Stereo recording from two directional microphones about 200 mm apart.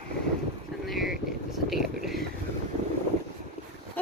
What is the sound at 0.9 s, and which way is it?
Vehicle, centre (ahead or behind).